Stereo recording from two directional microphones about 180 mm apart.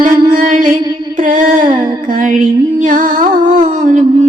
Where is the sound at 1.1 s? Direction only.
50° right (ahead or behind).